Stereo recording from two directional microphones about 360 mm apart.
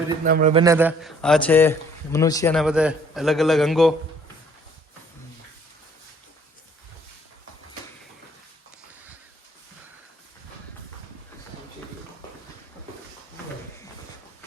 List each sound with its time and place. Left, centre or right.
0.3 s a man's voice: right
0.6 s a man's voice: centre